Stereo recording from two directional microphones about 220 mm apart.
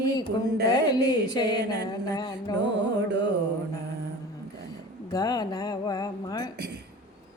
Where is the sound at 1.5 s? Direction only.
50° right (ahead or behind).